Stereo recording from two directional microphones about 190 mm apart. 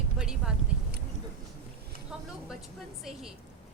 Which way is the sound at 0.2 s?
5° right (ahead or behind).